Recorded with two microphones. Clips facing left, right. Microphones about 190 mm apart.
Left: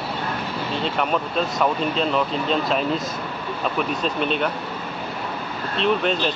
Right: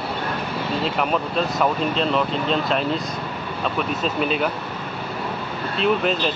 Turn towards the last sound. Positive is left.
turn(degrees=0)  # may be behind; listen again after turning